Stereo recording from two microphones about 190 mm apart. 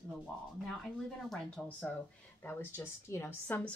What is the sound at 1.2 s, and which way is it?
A woman's voice, 5° left (ahead or behind).